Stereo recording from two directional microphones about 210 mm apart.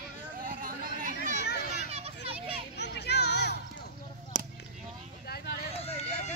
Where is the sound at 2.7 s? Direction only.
55° left (ahead or behind).